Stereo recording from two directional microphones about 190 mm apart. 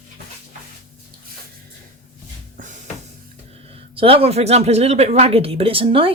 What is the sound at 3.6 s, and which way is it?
Speech, 30° right (ahead or behind).